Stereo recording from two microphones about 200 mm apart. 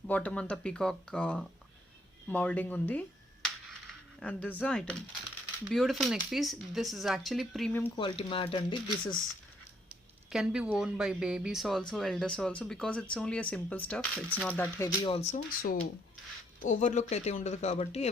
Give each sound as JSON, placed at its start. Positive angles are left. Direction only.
{"t": 0.1, "sound": "speech", "side_deg": 5}
{"t": 4.2, "sound": "speech", "side_deg": 5}
{"t": 7.9, "sound": "speech", "side_deg": 25}
{"t": 10.3, "sound": "speech", "side_deg": -5}
{"t": 15.0, "sound": "speech", "side_deg": 30}